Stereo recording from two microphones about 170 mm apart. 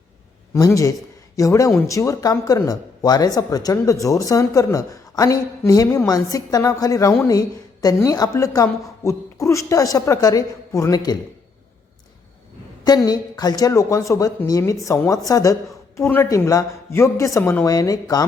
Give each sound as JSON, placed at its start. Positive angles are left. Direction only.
{"t": 0.5, "sound": "speech", "side_deg": 20}
{"t": 12.8, "sound": "speech", "side_deg": 20}